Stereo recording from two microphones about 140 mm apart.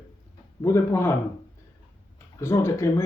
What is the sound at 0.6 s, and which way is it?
Speech, 20° left (ahead or behind).